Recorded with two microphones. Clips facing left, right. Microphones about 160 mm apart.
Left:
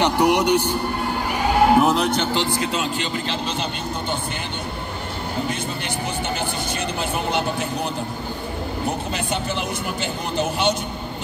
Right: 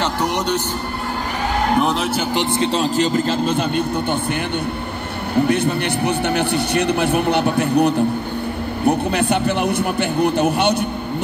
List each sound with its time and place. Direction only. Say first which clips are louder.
0.0 s music: left 3 dB; 10° left (ahead or behind)
1.8 s a man's voice: left 1 dB; centre (ahead or behind)
2.3 s speech: right 4 dB; 25° right (ahead or behind); by 4.2 s 55° right (ahead or behind)
5.5 s a man's voice: right 9 dB; 65° right (ahead or behind)